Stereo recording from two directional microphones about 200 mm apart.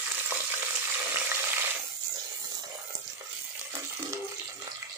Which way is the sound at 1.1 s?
10° right (ahead or behind).